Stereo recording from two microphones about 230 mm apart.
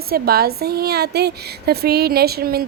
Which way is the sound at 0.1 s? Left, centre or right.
Right.